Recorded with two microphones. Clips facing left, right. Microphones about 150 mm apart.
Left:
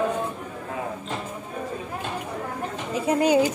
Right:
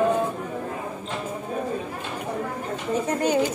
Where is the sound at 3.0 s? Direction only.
10° left (ahead or behind).